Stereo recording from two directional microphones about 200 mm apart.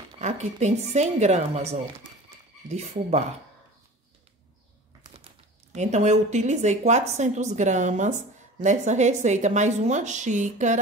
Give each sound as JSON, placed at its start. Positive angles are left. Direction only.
{"t": 0.2, "sound": "a woman's voice", "side_deg": -35}
{"t": 5.7, "sound": "a woman's voice", "side_deg": -35}